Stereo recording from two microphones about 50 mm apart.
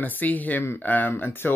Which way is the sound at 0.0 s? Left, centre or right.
Left.